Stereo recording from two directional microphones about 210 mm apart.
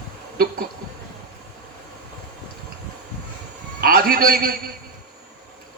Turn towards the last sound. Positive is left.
turn(degrees=-45)  # may be behind; listen again after turning